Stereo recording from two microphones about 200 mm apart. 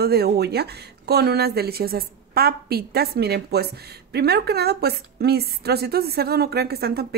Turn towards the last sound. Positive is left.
turn(degrees=-50)  # may be behind; listen again after turning